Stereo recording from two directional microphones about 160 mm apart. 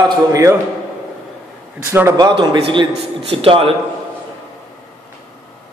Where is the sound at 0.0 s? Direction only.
20° right (ahead or behind).